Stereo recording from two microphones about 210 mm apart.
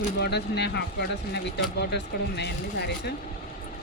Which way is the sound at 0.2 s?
50° left (ahead or behind).